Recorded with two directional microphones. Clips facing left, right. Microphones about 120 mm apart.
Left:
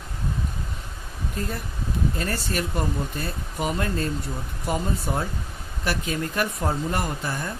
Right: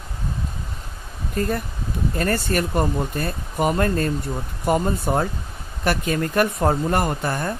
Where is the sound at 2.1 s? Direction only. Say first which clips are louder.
Right 6 dB; 55° right (ahead or behind).